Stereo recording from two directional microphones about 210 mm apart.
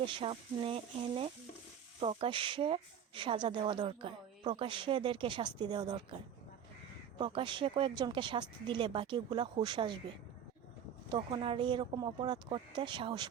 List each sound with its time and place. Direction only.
0.0 s speech: 25° right (ahead or behind)
7.2 s speech: 25° right (ahead or behind)
11.1 s speech: 25° right (ahead or behind)